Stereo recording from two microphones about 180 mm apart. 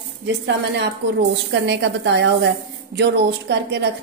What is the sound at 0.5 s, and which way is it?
A woman's voice, 75° right (ahead or behind).